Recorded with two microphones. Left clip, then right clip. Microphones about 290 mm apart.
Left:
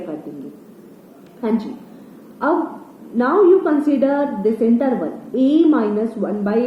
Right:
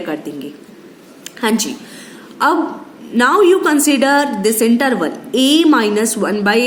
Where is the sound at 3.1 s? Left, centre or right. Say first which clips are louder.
Right 3 dB; right.